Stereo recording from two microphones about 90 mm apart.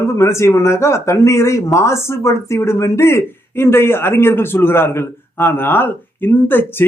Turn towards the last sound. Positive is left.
turn(degrees=25)  # may be behind; listen again after turning